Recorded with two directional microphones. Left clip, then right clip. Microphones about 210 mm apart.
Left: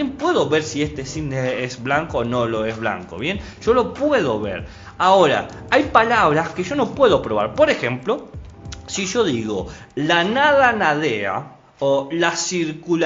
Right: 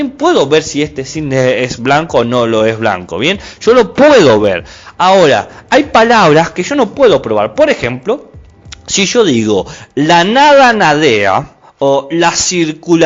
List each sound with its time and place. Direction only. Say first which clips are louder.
0.0 s a man's voice: right 9 dB; 40° right (ahead or behind)
6.9 s a man's voice: right 7 dB; 30° right (ahead or behind); by 13.0 s 45° right (ahead or behind)